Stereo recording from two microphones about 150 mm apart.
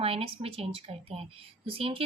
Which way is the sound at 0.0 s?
40° right (ahead or behind).